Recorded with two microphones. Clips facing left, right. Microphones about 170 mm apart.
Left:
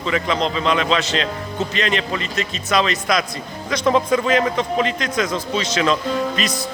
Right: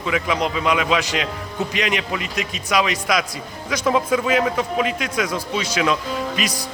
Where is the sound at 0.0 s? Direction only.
10° right (ahead or behind).